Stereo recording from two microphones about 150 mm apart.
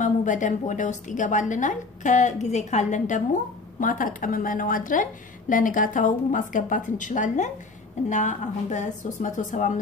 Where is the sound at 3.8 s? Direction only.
65° left (ahead or behind).